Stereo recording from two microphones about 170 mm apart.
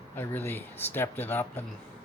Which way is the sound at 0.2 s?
10° left (ahead or behind).